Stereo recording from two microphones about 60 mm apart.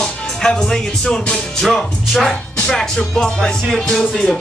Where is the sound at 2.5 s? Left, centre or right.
Centre.